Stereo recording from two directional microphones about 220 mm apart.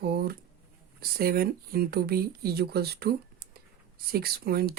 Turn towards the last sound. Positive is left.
turn(degrees=-45)  # may be behind; listen again after turning